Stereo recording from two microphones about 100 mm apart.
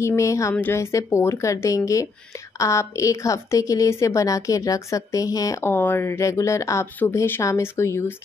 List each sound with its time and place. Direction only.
0.0 s a woman's voice: 30° left (ahead or behind)
5.7 s speech: 20° left (ahead or behind)